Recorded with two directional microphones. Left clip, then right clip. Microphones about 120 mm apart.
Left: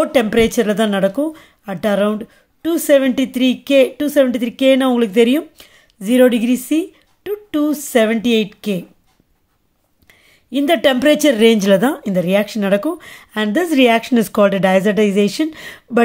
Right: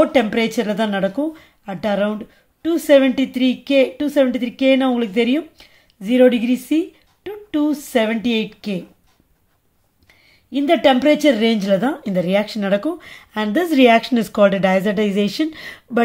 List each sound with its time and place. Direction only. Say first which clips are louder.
0.0 s speech: left 2 dB; 55° left (ahead or behind)
10.0 s speech: left 3 dB; 60° left (ahead or behind); by 12.0 s 45° left (ahead or behind)
12.0 s a woman's voice: left 2 dB; 30° left (ahead or behind)